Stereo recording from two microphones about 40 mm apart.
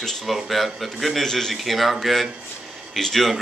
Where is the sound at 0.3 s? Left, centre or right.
Centre.